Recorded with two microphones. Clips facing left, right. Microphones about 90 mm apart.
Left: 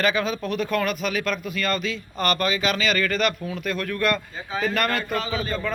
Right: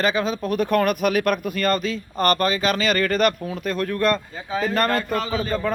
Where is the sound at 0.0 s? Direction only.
35° right (ahead or behind).